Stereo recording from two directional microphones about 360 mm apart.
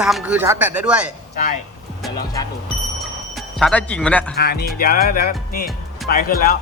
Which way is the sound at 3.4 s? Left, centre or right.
Centre.